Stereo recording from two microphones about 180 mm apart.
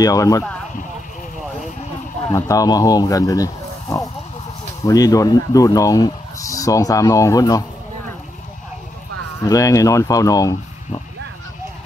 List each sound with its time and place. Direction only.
0.0 s speech: 20° left (ahead or behind)
2.3 s speech: 20° left (ahead or behind)
9.4 s speech: 20° left (ahead or behind)